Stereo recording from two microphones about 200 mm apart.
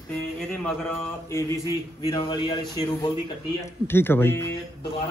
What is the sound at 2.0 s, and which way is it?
A man's voice, 25° left (ahead or behind).